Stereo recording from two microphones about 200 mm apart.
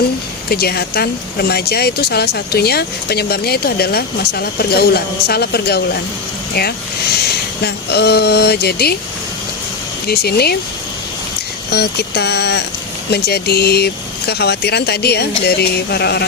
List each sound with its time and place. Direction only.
0.5 s speech: 50° left (ahead or behind)
7.6 s speech: 55° left (ahead or behind)
10.1 s speech: 50° left (ahead or behind)
11.7 s speech: 55° left (ahead or behind)